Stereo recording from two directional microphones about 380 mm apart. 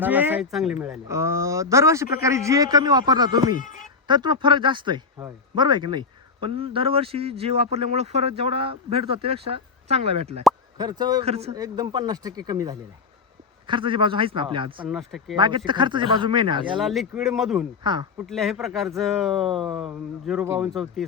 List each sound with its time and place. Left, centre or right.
0.0 s speech: centre
3.6 s speech: centre
4.0 s speech: centre
14.8 s speech: centre
15.4 s speech: centre
16.8 s speech: centre
17.8 s speech: centre
18.3 s speech: centre